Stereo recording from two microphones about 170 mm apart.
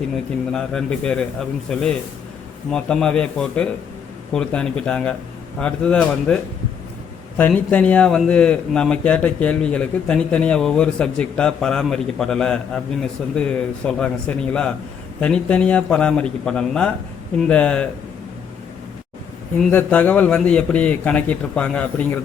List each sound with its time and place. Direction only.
0.5 s a man's voice: 5° left (ahead or behind)
19.5 s a man's voice: 10° left (ahead or behind)